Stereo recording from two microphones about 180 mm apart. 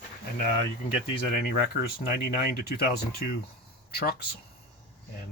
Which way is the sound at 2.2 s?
60° left (ahead or behind).